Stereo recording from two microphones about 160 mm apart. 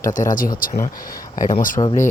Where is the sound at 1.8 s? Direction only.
25° left (ahead or behind).